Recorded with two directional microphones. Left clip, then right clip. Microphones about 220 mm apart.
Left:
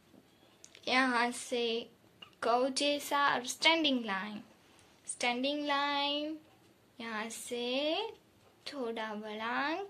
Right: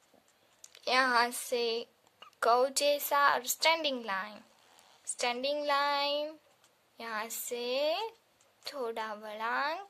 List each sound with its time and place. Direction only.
0.7 s speech: 35° right (ahead or behind)